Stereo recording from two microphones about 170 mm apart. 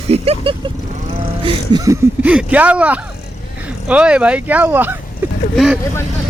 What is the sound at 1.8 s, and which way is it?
Speech, 15° right (ahead or behind).